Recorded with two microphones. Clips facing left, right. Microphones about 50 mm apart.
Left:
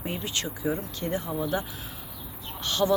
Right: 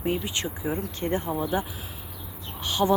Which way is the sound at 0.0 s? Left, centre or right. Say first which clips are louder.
Right 4 dB; centre.